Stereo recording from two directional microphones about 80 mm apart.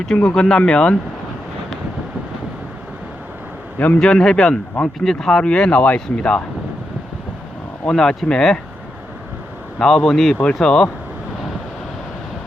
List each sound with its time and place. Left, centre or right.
0.2 s speech: centre
4.0 s speech: centre
7.9 s speech: centre
9.7 s speech: centre